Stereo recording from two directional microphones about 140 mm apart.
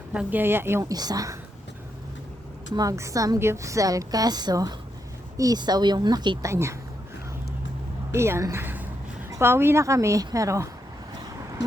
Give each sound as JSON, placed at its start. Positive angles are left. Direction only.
{"t": 0.1, "sound": "a woman's voice", "side_deg": -10}
{"t": 2.7, "sound": "a woman's voice", "side_deg": -25}
{"t": 6.5, "sound": "a woman's voice", "side_deg": -20}
{"t": 8.1, "sound": "a woman's voice", "side_deg": -20}